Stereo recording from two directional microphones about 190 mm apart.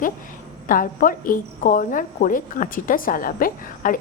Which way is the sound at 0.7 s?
45° left (ahead or behind).